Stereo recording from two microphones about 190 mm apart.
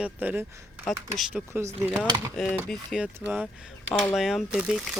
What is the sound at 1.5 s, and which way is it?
Speech, 10° right (ahead or behind).